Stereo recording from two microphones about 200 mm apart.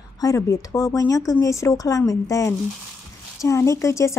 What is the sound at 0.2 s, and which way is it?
Speech, 15° left (ahead or behind).